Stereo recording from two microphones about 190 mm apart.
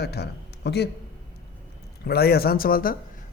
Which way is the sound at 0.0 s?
60° left (ahead or behind).